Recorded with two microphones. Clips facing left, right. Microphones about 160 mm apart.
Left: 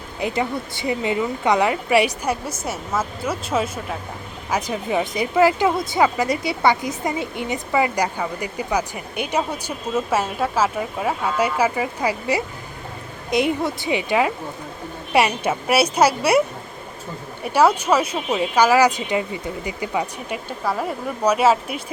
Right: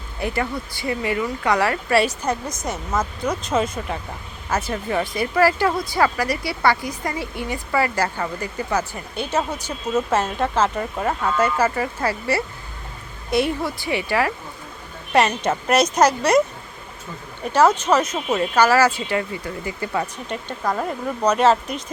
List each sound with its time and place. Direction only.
0.2 s speech: 20° left (ahead or behind)
17.4 s speech: 10° left (ahead or behind)